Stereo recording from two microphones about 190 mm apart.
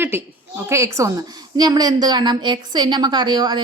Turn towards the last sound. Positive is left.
turn(degrees=-25)  # may be behind; listen again after turning